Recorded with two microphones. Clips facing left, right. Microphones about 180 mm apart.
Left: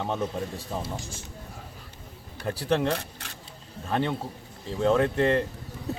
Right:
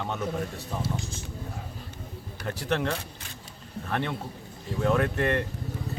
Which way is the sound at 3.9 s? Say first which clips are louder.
Left 4 dB; 25° left (ahead or behind).